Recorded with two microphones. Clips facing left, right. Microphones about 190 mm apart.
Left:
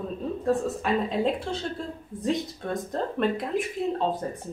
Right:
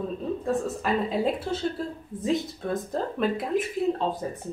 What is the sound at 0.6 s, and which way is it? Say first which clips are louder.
Speech: even; centre (ahead or behind).